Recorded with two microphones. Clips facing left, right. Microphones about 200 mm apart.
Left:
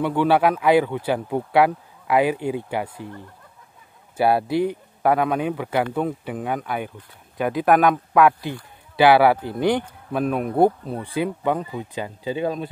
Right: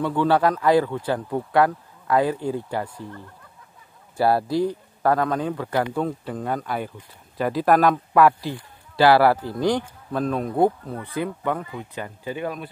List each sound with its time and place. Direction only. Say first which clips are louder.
0.2 s speech: left 1 dB; 5° left (ahead or behind)
4.2 s speech: left 1 dB; centre (ahead or behind)
4.5 s speech: left 1 dB; 65° left (ahead or behind)
5.0 s speech: left 1 dB; 5° left (ahead or behind)
10.1 s speech: left 2 dB; 10° left (ahead or behind)
10.5 s speech: left 3 dB; 20° left (ahead or behind)